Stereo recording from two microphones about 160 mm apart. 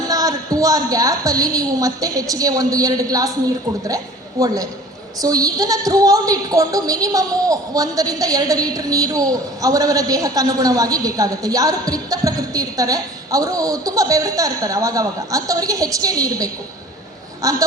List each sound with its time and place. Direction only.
0.1 s a woman's voice: 20° right (ahead or behind)